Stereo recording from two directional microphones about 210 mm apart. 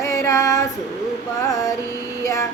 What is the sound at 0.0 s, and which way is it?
Female singing, 15° left (ahead or behind).